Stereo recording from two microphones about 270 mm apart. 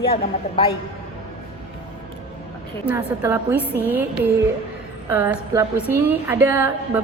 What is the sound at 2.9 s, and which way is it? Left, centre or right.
A woman's voice, centre.